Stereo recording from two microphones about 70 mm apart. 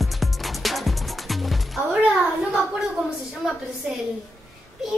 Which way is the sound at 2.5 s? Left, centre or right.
Centre.